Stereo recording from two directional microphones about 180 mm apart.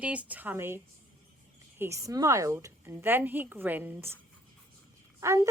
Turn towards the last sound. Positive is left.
turn(degrees=-15)  # may be behind; listen again after turning